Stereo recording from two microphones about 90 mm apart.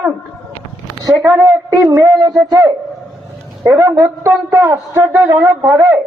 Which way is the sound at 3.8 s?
30° right (ahead or behind).